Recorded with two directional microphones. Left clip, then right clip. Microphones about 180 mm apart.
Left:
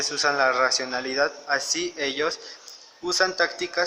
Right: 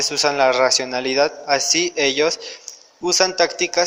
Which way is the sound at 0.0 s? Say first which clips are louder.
Right 5 dB; 20° right (ahead or behind).